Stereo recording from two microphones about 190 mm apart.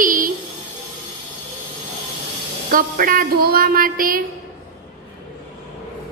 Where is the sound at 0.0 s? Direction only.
45° right (ahead or behind).